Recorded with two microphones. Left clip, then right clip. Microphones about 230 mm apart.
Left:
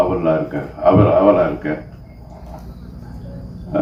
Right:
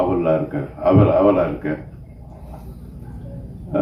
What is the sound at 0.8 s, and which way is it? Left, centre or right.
Speech, right.